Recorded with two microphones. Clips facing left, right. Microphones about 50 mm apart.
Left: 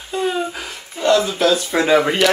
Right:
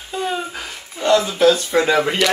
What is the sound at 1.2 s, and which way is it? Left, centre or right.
Speech, centre.